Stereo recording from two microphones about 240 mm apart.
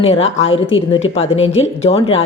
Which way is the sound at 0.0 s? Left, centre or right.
Left.